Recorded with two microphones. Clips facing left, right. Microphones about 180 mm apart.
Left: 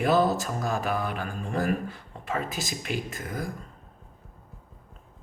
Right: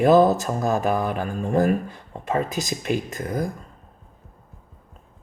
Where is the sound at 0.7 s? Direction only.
45° right (ahead or behind).